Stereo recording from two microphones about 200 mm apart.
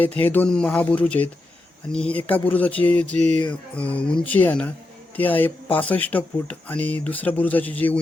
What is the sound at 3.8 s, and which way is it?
Speech, 5° left (ahead or behind).